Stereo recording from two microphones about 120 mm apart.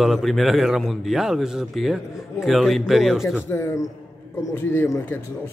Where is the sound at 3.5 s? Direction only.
20° left (ahead or behind).